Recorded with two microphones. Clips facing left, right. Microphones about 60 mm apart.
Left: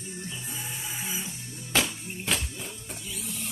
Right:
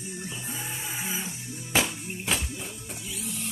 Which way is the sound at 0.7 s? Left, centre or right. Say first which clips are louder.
Right 2 dB; right.